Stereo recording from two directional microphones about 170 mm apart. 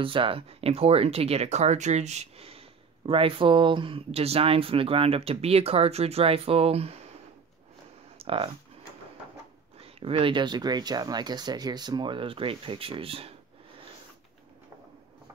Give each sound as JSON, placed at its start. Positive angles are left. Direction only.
{"t": 0.0, "sound": "speech", "side_deg": -30}
{"t": 8.2, "sound": "computer keyboard", "side_deg": -35}
{"t": 9.8, "sound": "speech", "side_deg": -35}